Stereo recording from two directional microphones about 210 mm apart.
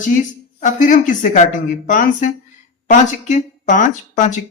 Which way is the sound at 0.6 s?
35° left (ahead or behind).